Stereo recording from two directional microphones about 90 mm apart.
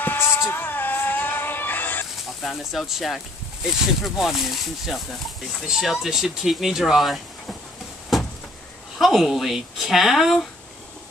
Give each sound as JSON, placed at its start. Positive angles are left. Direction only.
{"t": 0.0, "sound": "music", "side_deg": 25}
{"t": 2.4, "sound": "speech", "side_deg": 0}
{"t": 8.9, "sound": "speech", "side_deg": 0}